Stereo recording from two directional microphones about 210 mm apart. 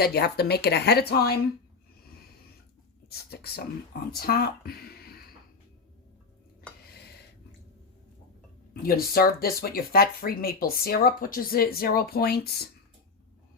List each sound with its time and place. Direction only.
0.0 s speech: 50° left (ahead or behind)
3.1 s speech: 50° left (ahead or behind)
8.8 s speech: 45° left (ahead or behind)